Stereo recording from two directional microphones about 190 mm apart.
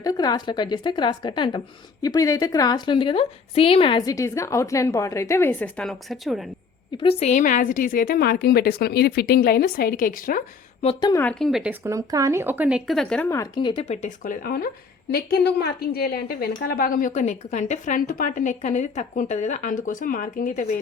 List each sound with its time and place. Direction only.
0.0 s a woman's voice: 20° left (ahead or behind); by 6.5 s centre (ahead or behind)
6.9 s a woman's voice: 30° left (ahead or behind); by 10.4 s 45° left (ahead or behind)
11.0 s speech: 15° left (ahead or behind)
11.3 s speech: centre (ahead or behind)
11.8 s speech: 15° right (ahead or behind); by 14.3 s 35° left (ahead or behind)
14.4 s a woman's voice: 55° left (ahead or behind)